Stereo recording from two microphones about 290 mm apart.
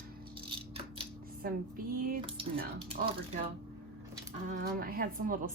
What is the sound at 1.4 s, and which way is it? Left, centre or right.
Speech, right.